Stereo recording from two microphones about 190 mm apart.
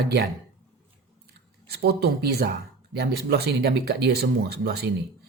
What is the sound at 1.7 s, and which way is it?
Speech, 55° right (ahead or behind).